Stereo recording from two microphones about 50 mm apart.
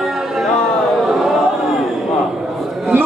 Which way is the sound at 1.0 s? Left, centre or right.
Centre.